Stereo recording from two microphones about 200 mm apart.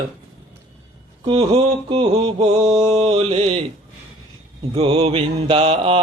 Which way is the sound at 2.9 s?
30° right (ahead or behind).